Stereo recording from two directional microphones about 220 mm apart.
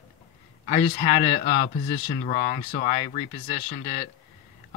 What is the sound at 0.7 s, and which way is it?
Speech, 25° left (ahead or behind).